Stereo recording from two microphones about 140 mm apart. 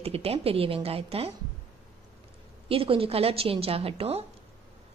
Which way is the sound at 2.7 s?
40° right (ahead or behind).